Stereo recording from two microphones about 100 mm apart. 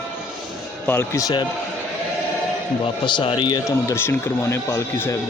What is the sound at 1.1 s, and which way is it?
Speech, 40° left (ahead or behind).